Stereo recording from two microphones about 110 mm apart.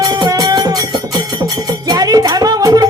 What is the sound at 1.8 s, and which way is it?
Music, 35° right (ahead or behind).